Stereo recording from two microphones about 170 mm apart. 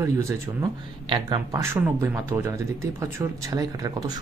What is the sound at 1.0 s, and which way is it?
Speech, 30° right (ahead or behind).